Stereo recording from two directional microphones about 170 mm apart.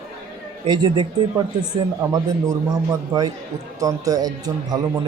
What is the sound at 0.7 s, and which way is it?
Speech, 25° right (ahead or behind).